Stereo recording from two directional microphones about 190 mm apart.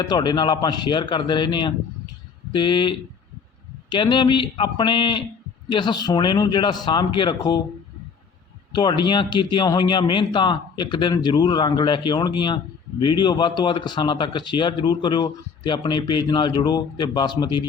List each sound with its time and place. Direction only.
0.0 s speech: 20° left (ahead or behind)
8.7 s speech: 25° left (ahead or behind)